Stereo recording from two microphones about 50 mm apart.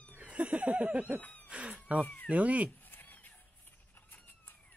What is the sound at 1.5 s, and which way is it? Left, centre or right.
Cat, right.